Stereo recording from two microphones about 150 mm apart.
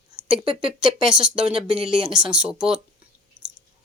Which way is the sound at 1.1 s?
5° right (ahead or behind).